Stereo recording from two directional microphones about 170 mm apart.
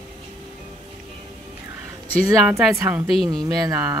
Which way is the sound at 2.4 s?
5° right (ahead or behind).